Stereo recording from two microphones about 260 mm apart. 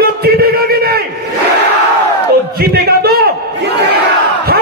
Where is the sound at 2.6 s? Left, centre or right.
Right.